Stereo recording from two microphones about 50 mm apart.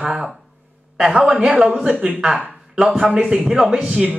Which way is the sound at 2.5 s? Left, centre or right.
Centre.